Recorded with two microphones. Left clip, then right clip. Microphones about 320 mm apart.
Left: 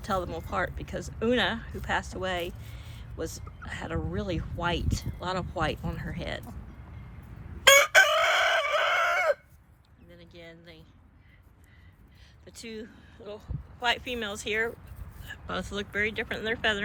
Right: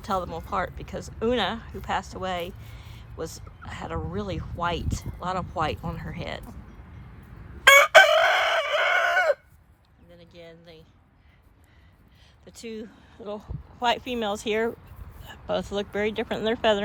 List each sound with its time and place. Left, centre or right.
0.0 s speech: centre
7.6 s chicken: centre; by 9.4 s right
10.1 s a sound: centre
12.5 s speech: centre